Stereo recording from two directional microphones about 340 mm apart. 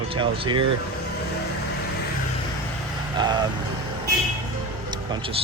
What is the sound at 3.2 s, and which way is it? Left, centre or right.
Speech, centre.